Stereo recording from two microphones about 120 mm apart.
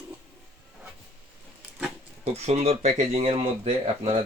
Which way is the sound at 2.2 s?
60° right (ahead or behind).